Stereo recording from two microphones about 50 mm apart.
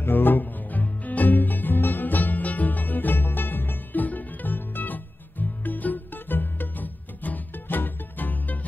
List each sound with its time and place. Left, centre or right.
0.0 s music: left